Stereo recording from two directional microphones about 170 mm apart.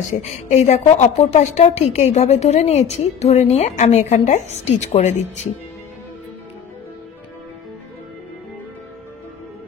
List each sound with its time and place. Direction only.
0.1 s a woman's voice: 40° left (ahead or behind)